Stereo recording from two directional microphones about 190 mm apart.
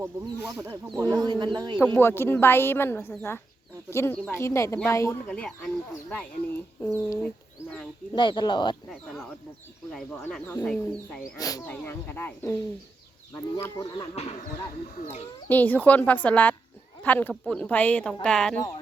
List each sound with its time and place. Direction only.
0.0 s speech: 15° right (ahead or behind)
1.8 s speech: 10° left (ahead or behind)
8.9 s speech: centre (ahead or behind)
11.3 s speech: 20° left (ahead or behind)
13.8 s speech: 30° left (ahead or behind)
15.4 s speech: 10° left (ahead or behind)